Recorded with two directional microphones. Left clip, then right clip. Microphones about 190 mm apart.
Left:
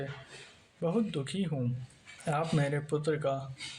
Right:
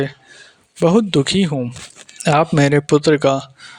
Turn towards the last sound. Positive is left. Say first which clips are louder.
# right 17 dB
turn(degrees=-50)  # may be behind; listen again after turning